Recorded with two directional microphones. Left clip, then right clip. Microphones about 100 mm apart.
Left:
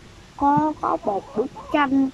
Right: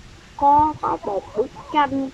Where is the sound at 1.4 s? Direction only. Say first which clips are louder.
Right 5 dB; 15° left (ahead or behind).